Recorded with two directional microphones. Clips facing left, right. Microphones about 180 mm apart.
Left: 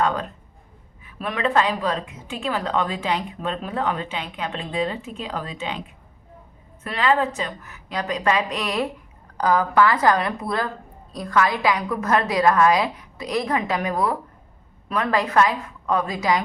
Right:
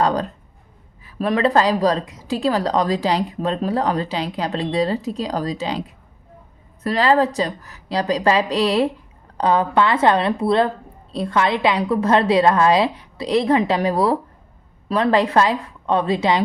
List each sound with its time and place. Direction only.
0.0 s a woman's voice: 35° right (ahead or behind)